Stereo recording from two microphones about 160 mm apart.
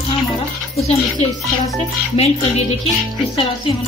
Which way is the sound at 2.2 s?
40° left (ahead or behind).